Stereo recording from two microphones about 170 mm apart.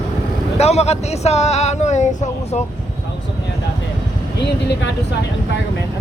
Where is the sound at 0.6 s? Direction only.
40° left (ahead or behind).